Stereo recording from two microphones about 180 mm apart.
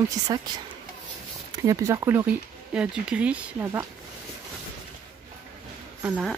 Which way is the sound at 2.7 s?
5° right (ahead or behind).